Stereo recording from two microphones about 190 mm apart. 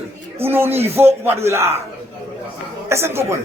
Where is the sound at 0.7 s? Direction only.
30° right (ahead or behind).